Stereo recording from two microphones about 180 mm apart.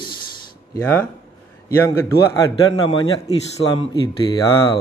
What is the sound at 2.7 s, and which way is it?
A man's voice, 25° left (ahead or behind).